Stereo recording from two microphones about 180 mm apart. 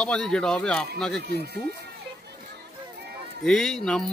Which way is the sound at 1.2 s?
65° right (ahead or behind).